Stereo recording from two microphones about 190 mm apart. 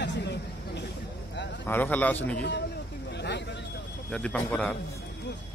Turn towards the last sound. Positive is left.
turn(degrees=5)  # may be behind; listen again after turning